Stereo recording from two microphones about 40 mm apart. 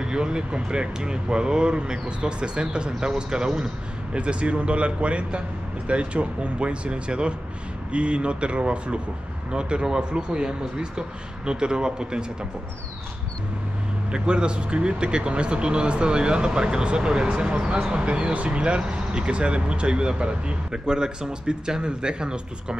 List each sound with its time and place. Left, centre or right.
0.0 s speech: right
14.1 s speech: right